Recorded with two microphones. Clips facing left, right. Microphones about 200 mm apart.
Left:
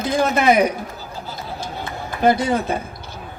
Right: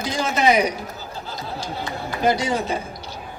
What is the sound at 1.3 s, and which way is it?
Chatter, 55° left (ahead or behind).